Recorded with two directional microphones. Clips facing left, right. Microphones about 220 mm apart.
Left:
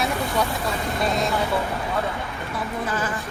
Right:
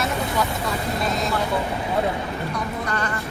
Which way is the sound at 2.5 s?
5° left (ahead or behind).